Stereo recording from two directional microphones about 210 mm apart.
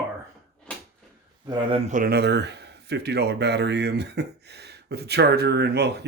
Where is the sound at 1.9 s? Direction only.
40° right (ahead or behind).